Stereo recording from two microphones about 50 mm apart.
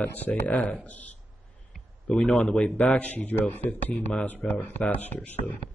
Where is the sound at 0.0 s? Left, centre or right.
Left.